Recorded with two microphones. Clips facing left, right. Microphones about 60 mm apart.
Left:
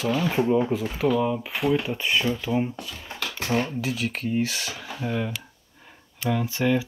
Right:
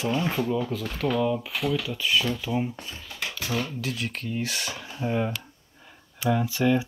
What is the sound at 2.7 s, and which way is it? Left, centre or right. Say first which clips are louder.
Speech: left 2 dB; right.